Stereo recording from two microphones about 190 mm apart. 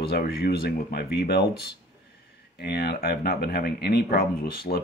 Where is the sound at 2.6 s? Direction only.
55° left (ahead or behind).